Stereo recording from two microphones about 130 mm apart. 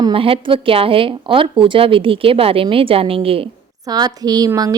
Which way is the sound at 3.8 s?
30° right (ahead or behind).